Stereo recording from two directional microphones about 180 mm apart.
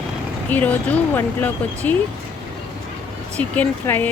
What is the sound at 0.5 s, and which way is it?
Speech, 10° left (ahead or behind).